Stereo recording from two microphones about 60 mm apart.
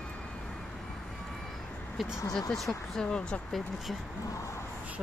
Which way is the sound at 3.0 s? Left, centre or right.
Centre.